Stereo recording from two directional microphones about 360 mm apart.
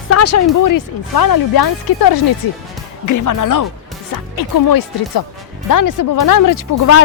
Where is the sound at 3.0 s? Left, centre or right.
Left.